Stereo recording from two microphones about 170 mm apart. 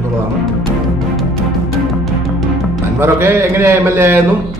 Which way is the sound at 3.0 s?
15° right (ahead or behind).